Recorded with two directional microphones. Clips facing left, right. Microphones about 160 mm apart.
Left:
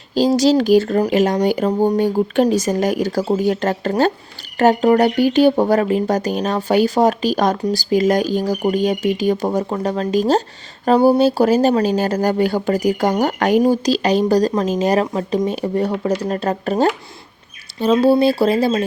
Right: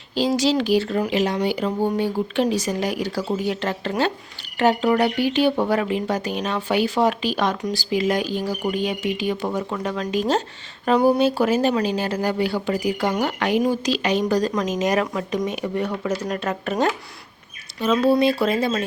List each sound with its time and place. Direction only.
0.1 s speech: 40° left (ahead or behind)